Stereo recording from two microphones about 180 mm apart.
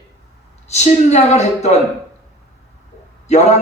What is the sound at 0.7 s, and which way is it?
A man's voice, 40° left (ahead or behind).